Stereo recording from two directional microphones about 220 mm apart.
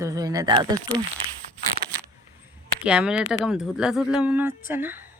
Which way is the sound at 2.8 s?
5° right (ahead or behind).